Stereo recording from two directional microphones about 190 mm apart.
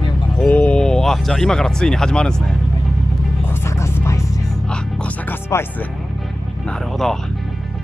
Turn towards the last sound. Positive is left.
turn(degrees=0)  # may be behind; listen again after turning